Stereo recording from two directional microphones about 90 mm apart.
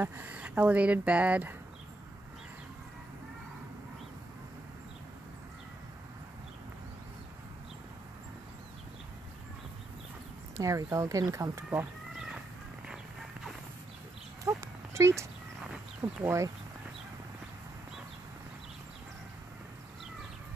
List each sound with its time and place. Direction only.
0.0 s speech: 20° right (ahead or behind)
10.6 s speech: 35° right (ahead or behind)
14.5 s horse: 25° right (ahead or behind)
15.0 s speech: 35° right (ahead or behind)
16.3 s speech: 35° right (ahead or behind)